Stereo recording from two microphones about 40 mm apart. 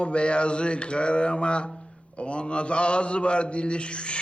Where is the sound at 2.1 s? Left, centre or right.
Left.